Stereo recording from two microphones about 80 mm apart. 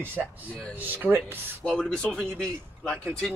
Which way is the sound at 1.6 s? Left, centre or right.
Centre.